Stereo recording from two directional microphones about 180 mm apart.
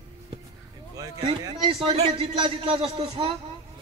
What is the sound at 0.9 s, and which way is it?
A man's voice, 25° right (ahead or behind).